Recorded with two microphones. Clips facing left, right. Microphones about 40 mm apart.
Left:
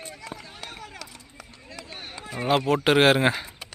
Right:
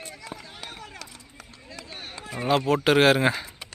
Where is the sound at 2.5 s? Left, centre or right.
Left.